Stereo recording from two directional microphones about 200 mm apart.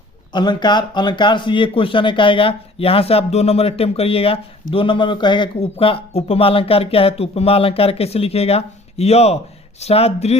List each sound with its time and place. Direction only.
0.3 s speech: 20° left (ahead or behind)